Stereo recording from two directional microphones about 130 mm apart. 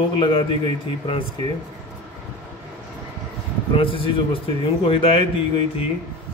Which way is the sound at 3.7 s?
40° left (ahead or behind).